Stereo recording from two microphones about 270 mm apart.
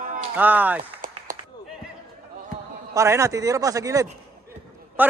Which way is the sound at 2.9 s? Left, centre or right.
Centre.